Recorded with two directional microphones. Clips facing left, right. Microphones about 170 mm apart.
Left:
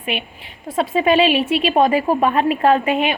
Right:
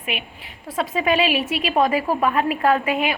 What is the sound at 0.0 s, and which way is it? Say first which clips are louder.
A woman's voice: left 4 dB; 30° left (ahead or behind).